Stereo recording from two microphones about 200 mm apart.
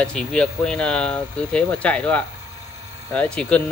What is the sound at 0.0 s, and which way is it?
Speech, 5° left (ahead or behind).